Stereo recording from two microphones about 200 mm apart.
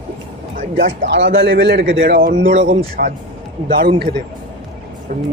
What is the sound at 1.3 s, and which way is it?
Speech, 50° right (ahead or behind).